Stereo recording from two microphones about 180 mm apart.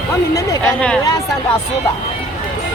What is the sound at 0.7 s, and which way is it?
Speech, 5° left (ahead or behind).